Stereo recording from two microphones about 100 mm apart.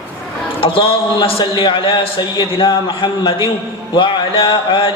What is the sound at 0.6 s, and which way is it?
A man's voice, 65° left (ahead or behind).